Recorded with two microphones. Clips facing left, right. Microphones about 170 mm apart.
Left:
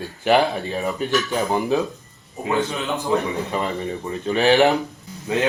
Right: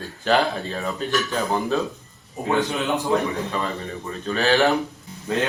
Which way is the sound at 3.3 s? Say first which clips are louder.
Left 2 dB; 20° left (ahead or behind).